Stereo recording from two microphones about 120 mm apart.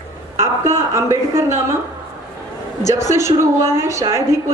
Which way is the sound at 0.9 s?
25° right (ahead or behind).